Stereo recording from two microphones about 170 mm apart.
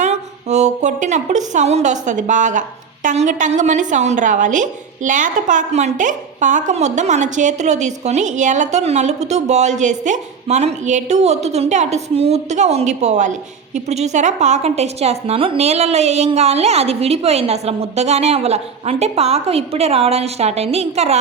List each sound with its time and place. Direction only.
0.0 s speech: 40° right (ahead or behind)